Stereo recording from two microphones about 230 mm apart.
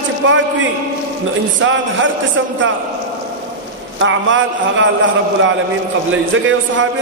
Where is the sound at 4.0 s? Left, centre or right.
Right.